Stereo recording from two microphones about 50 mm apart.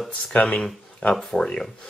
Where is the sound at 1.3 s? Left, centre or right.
Centre.